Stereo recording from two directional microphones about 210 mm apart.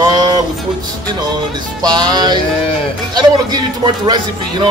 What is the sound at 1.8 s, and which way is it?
Speech, 20° right (ahead or behind).